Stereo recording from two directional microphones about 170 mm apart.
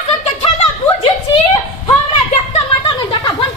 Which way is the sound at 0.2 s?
35° left (ahead or behind).